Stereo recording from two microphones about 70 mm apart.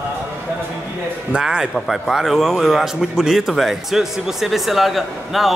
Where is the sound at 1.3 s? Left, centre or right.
Centre.